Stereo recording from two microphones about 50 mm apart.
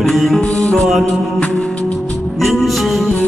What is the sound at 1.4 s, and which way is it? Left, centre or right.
Music, left.